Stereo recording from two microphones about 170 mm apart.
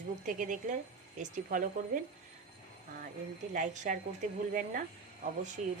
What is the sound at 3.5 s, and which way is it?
A woman's voice, 45° right (ahead or behind).